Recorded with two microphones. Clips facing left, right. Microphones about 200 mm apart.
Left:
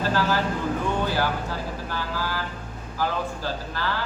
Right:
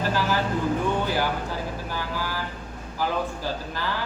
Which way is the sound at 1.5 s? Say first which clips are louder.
Even; 15° right (ahead or behind).